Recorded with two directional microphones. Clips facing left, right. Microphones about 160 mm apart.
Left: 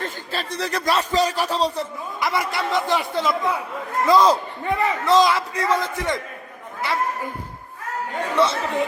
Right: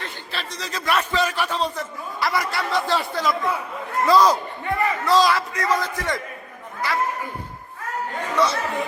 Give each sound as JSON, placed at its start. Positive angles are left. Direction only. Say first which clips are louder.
{"t": 0.0, "sound": "a sound", "louder": "left 4 dB", "side_deg": 45}
{"t": 0.6, "sound": "a man's voice", "louder": "left 6 dB", "side_deg": 65}
{"t": 0.9, "sound": "a man's voice", "louder": "left 1 dB", "side_deg": 35}
{"t": 2.2, "sound": "a man's voice", "louder": "left 1 dB", "side_deg": 20}
{"t": 8.4, "sound": "a man's voice", "louder": "left 2 dB", "side_deg": 25}